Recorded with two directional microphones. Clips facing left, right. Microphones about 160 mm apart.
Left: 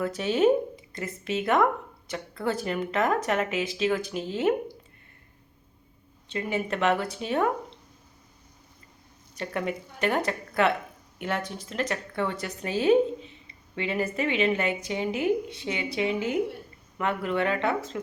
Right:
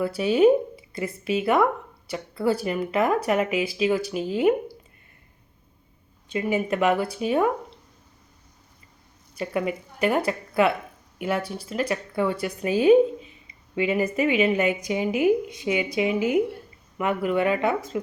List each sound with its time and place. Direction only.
0.0 s speech: 10° right (ahead or behind)
6.2 s speech: 10° right (ahead or behind)
9.3 s speech: 10° right (ahead or behind)